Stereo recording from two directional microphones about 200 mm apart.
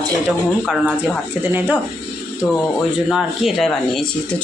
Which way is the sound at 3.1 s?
Centre (ahead or behind).